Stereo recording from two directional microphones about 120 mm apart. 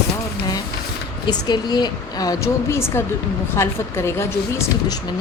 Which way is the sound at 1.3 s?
35° left (ahead or behind).